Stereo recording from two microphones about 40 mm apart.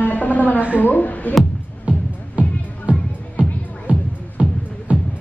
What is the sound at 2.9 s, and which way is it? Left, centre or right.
Music, right.